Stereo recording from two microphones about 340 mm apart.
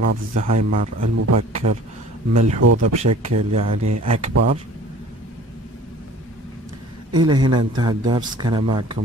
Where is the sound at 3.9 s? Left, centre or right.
Right.